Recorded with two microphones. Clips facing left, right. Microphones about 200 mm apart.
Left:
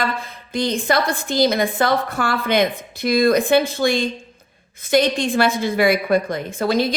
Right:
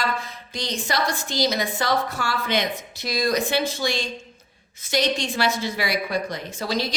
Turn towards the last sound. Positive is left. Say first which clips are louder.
# left 7 dB
turn(degrees=55)  # may be behind; listen again after turning